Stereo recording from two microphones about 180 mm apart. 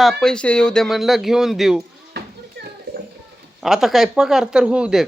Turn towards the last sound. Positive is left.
turn(degrees=-5)  # may be behind; listen again after turning